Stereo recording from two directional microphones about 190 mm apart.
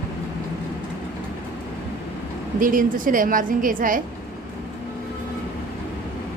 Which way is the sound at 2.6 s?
45° right (ahead or behind).